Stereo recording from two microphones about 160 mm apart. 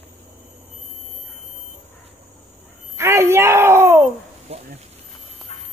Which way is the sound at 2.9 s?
15° right (ahead or behind).